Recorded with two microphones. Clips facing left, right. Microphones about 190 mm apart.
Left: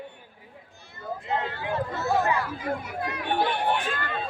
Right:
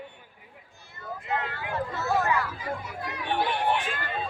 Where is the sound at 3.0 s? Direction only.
55° left (ahead or behind).